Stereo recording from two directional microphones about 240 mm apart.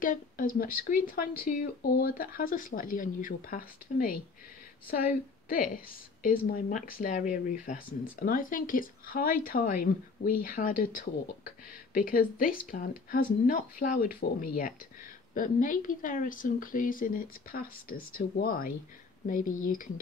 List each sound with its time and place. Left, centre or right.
0.0 s speech: left